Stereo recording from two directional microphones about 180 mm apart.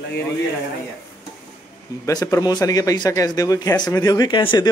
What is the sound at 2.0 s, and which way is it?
Speech, 20° left (ahead or behind).